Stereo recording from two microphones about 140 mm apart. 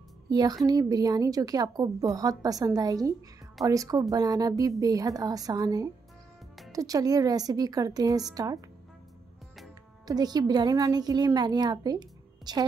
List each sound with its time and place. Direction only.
0.3 s speech: 30° right (ahead or behind)
10.0 s speech: 30° right (ahead or behind)